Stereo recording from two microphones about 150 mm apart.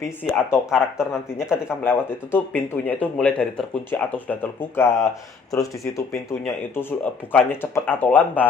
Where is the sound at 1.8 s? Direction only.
15° left (ahead or behind).